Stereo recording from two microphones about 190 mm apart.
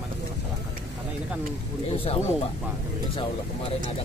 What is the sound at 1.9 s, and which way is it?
Speech, 30° left (ahead or behind).